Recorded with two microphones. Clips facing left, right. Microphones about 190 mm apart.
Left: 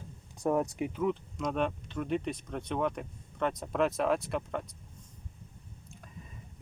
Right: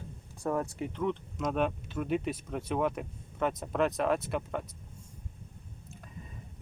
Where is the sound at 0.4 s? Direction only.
15° left (ahead or behind).